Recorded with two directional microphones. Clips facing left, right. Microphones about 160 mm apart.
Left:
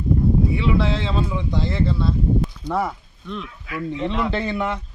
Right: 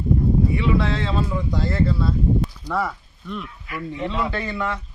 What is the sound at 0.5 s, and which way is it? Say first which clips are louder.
Speech: even; centre (ahead or behind).